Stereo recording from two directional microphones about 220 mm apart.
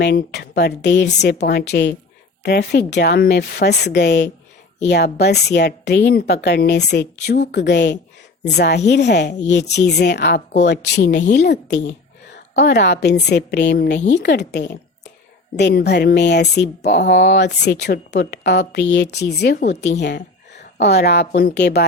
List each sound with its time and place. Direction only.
0.0 s speech: 50° left (ahead or behind)
12.6 s speech: 50° left (ahead or behind)